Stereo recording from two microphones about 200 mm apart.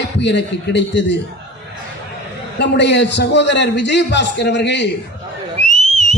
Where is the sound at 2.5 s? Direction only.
60° left (ahead or behind).